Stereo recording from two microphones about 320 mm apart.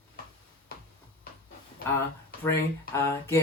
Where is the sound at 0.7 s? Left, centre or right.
Left.